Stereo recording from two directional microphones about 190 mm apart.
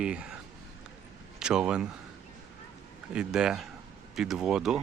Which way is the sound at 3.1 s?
5° right (ahead or behind).